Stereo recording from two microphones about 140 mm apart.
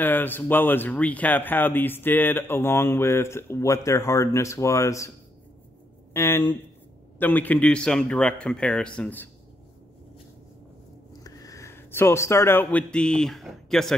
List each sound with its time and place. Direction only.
0.0 s speech: 15° left (ahead or behind)
6.1 s speech: 15° left (ahead or behind)
11.2 s speech: 25° left (ahead or behind); by 13.9 s centre (ahead or behind)